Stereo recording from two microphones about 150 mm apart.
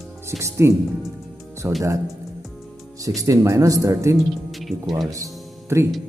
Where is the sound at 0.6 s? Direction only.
20° right (ahead or behind).